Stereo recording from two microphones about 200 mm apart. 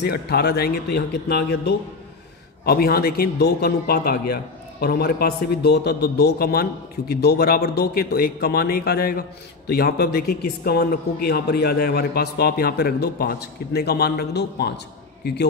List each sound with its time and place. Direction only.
0.0 s a man's voice: 55° left (ahead or behind)